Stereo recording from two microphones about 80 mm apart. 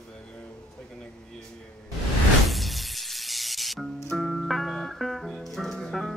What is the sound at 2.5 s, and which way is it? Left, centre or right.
Music, centre.